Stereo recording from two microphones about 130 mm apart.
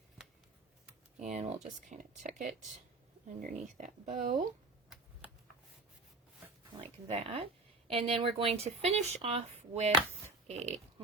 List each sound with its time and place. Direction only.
1.1 s computer keyboard: 65° right (ahead or behind)
1.6 s speech: 70° right (ahead or behind)
7.1 s speech: 50° right (ahead or behind)